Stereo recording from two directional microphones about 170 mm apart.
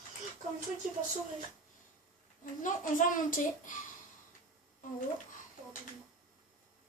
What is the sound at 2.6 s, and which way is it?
A woman's voice, 50° left (ahead or behind).